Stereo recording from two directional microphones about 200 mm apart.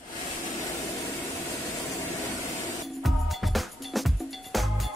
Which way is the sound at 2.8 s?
Centre (ahead or behind).